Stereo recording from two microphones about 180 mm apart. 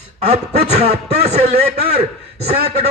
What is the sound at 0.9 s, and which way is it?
A man's voice, 35° right (ahead or behind).